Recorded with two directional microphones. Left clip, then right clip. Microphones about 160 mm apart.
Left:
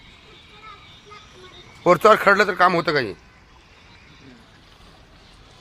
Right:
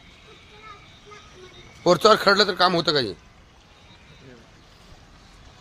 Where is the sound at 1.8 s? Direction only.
Centre (ahead or behind); by 3.2 s 15° right (ahead or behind).